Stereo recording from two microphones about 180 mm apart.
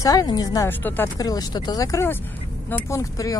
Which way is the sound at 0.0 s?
20° left (ahead or behind).